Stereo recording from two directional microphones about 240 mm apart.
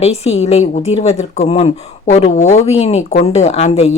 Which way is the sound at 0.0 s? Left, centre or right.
Left.